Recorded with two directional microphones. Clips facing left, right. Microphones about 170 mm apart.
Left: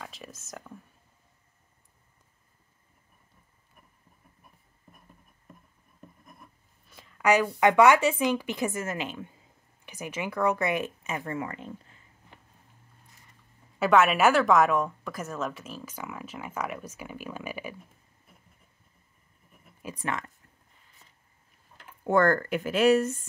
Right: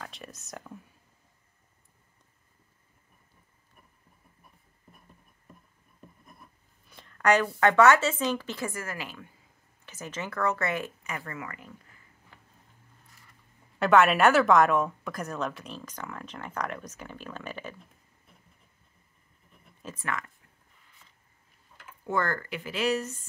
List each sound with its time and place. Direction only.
0.0 s speech: centre (ahead or behind)
6.9 s a woman's voice: 5° left (ahead or behind); by 12.4 s 25° left (ahead or behind)
13.7 s a woman's voice: centre (ahead or behind)
19.5 s a sound: 10° left (ahead or behind)
22.0 s speech: 50° left (ahead or behind)